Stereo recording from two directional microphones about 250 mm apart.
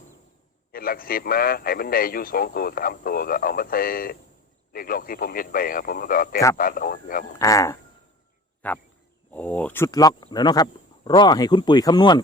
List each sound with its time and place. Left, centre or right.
0.7 s a man's voice: left
7.3 s speech: centre